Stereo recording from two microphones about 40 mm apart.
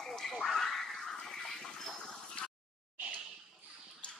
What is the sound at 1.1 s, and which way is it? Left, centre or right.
Toilet flush, centre.